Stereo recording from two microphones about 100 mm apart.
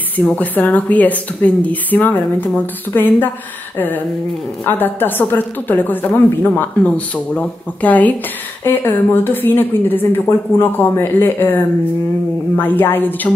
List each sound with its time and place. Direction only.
0.2 s a woman's voice: 15° left (ahead or behind)